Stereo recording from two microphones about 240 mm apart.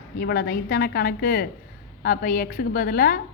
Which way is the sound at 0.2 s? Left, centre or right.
Left.